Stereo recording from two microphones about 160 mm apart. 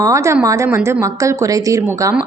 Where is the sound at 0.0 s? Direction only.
20° right (ahead or behind).